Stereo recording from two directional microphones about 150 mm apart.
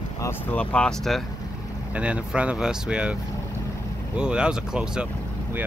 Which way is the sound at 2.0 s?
10° right (ahead or behind).